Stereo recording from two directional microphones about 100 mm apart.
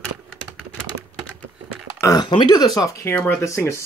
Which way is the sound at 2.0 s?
35° left (ahead or behind).